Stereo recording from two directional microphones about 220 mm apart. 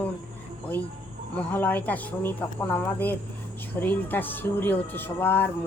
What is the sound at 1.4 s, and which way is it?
Speech, 10° left (ahead or behind).